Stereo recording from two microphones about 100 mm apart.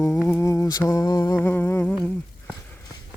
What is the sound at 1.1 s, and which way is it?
Speech, 40° left (ahead or behind).